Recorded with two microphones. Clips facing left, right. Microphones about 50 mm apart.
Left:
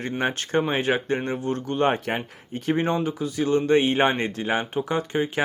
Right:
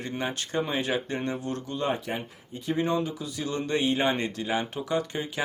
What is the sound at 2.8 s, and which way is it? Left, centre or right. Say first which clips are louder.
Speech: left 3 dB; left.